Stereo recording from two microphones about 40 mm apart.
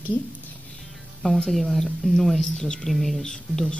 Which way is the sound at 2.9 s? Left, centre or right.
Centre.